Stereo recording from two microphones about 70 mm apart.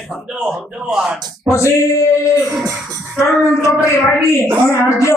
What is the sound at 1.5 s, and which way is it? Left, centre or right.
Speech, left.